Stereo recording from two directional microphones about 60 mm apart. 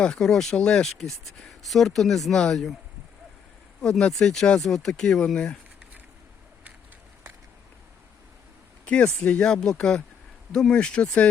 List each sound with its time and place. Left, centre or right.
0.0 s speech: centre
0.5 s speech: centre
0.9 s speech: centre
3.8 s speech: centre
8.8 s speech: left